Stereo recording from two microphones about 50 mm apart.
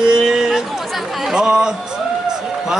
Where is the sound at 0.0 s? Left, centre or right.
Centre.